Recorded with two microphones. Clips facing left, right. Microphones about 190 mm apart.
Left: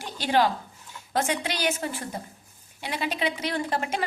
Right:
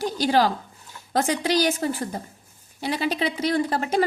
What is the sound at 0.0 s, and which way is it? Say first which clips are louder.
A woman's voice: right 3 dB; 35° right (ahead or behind).